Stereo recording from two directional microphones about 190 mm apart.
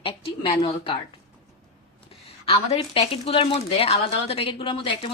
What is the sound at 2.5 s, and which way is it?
A woman's voice, 30° left (ahead or behind).